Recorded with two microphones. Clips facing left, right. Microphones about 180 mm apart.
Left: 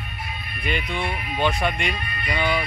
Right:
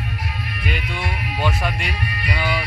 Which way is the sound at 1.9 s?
75° right (ahead or behind).